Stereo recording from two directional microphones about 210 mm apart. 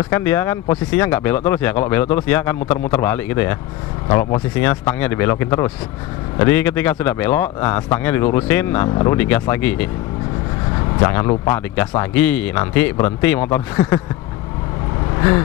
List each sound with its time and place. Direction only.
0.1 s a man's voice: 10° left (ahead or behind)
11.0 s a man's voice: 15° left (ahead or behind)
15.1 s speech: 15° left (ahead or behind)